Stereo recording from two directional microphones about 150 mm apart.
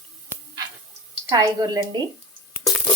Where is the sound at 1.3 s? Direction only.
25° right (ahead or behind).